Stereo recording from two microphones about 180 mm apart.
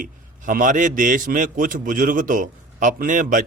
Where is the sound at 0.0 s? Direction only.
45° right (ahead or behind).